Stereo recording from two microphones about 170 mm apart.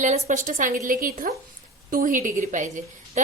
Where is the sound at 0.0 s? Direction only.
45° right (ahead or behind).